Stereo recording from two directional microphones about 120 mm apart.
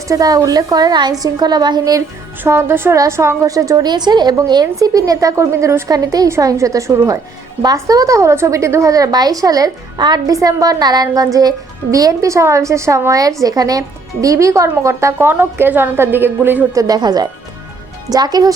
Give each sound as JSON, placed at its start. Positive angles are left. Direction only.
{"t": 0.1, "sound": "a woman's voice", "side_deg": -30}
{"t": 2.4, "sound": "a woman's voice", "side_deg": -20}
{"t": 16.7, "sound": "a woman's voice", "side_deg": -30}